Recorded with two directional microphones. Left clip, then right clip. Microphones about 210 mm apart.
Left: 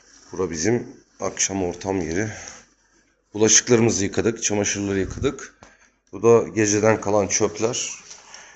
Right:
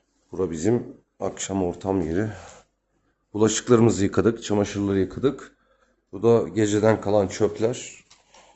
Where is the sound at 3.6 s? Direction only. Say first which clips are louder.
Even; 25° right (ahead or behind).